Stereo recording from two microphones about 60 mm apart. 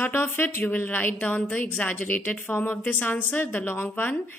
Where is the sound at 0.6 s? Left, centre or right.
Left.